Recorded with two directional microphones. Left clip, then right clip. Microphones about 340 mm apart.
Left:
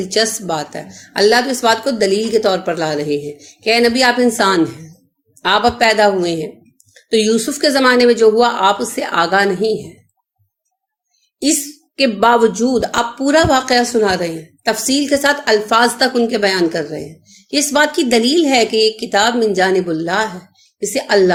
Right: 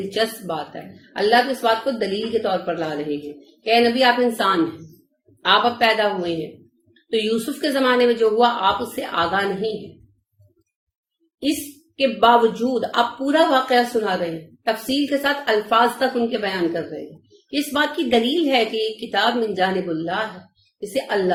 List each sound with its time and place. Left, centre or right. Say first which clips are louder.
0.1 s a woman's voice: left 7 dB; left
11.9 s a woman's voice: left 3 dB; left